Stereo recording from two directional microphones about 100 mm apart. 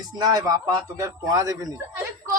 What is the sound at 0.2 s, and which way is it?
Speech, 40° right (ahead or behind).